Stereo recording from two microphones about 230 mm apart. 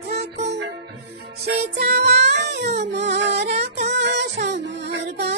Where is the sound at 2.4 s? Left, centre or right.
Right.